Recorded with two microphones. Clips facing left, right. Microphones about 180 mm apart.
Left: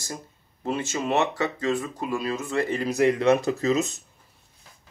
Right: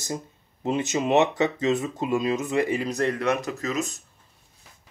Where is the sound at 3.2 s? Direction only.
30° left (ahead or behind).